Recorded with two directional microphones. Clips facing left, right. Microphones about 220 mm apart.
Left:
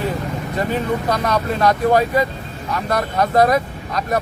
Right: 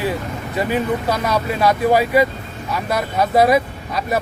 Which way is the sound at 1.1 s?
5° right (ahead or behind).